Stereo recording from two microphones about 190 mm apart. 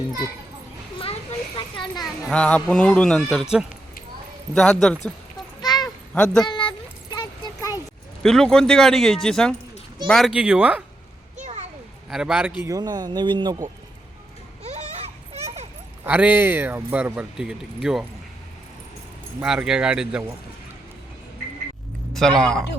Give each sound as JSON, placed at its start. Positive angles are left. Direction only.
{"t": 1.5, "sound": "a sound", "side_deg": 25}
{"t": 2.0, "sound": "speech", "side_deg": 5}
{"t": 4.5, "sound": "speech", "side_deg": 5}
{"t": 5.6, "sound": "a sound", "side_deg": 20}
{"t": 6.1, "sound": "speech", "side_deg": 5}
{"t": 6.4, "sound": "a sound", "side_deg": 25}
{"t": 8.2, "sound": "speech", "side_deg": 5}
{"t": 11.3, "sound": "children playing", "side_deg": -40}
{"t": 12.1, "sound": "speech", "side_deg": -5}
{"t": 12.6, "sound": "speech", "side_deg": -20}
{"t": 15.3, "sound": "a sound", "side_deg": -35}
{"t": 16.0, "sound": "speech", "side_deg": -10}
{"t": 19.4, "sound": "speech", "side_deg": -5}
{"t": 22.1, "sound": "a man's voice", "side_deg": 0}